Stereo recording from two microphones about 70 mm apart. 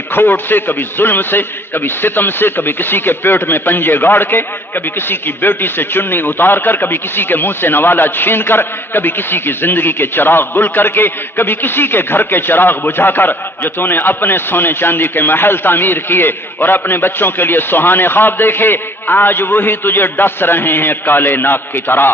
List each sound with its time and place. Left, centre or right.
0.1 s a man's voice: left